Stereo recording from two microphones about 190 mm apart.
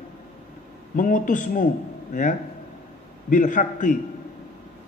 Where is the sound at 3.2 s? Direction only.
40° left (ahead or behind).